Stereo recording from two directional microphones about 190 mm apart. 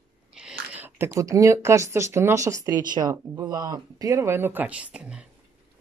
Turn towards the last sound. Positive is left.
turn(degrees=-5)  # may be behind; listen again after turning